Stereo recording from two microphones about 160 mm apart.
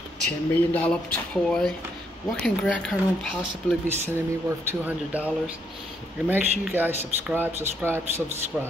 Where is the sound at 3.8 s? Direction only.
15° right (ahead or behind).